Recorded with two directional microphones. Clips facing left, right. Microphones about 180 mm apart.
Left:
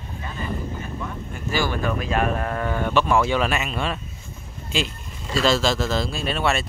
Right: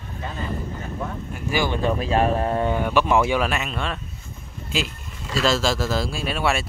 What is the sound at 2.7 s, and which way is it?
Speech, 10° right (ahead or behind).